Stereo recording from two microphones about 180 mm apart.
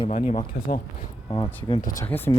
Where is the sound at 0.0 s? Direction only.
40° left (ahead or behind).